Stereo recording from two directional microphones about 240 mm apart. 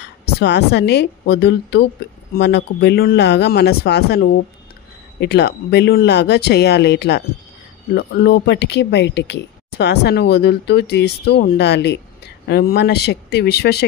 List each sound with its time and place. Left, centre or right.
0.2 s speech: left